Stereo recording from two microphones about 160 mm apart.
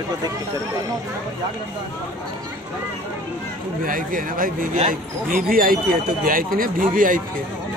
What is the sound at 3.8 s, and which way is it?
Speech, 60° right (ahead or behind).